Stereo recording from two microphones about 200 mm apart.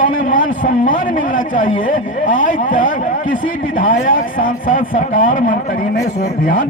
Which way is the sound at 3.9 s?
40° left (ahead or behind).